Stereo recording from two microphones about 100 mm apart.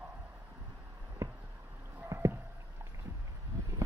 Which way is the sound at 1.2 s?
30° right (ahead or behind).